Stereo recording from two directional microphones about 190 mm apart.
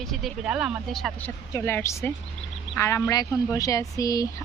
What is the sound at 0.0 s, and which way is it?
Speech, centre (ahead or behind).